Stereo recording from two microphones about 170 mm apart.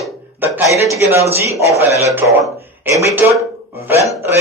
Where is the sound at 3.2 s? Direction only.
10° right (ahead or behind).